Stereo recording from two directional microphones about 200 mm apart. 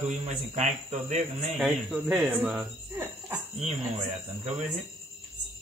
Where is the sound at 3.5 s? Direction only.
35° right (ahead or behind).